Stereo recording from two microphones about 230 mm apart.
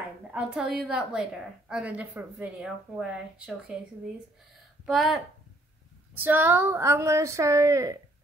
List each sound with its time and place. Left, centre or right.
0.3 s a woman's voice: centre
4.8 s a woman's voice: centre